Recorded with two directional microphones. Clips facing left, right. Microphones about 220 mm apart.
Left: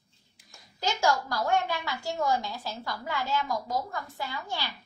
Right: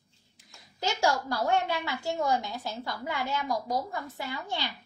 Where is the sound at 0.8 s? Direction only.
20° right (ahead or behind).